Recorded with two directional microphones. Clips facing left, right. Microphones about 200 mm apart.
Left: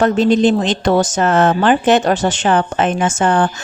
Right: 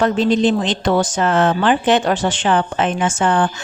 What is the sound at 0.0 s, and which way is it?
Speech, 45° left (ahead or behind).